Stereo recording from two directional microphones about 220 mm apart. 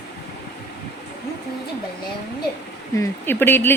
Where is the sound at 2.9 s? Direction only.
10° left (ahead or behind).